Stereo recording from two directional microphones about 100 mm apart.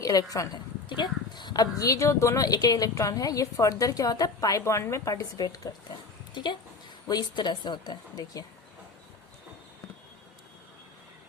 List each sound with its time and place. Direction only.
0.0 s speech: 35° left (ahead or behind)
0.9 s a woman's voice: 50° left (ahead or behind)